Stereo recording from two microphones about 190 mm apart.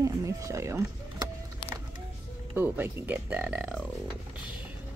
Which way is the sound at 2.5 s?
10° right (ahead or behind).